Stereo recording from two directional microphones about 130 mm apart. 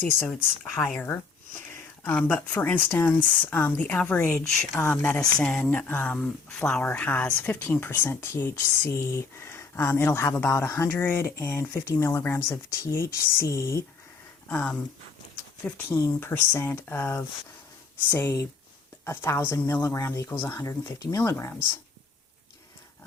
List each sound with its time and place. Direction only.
0.0 s speech: 15° left (ahead or behind)
14.4 s speech: 10° left (ahead or behind)